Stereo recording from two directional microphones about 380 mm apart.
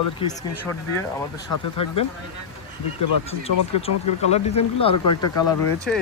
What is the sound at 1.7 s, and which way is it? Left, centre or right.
Speech, left.